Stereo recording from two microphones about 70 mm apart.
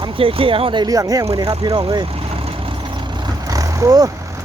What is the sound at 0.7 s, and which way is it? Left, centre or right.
Speech, right.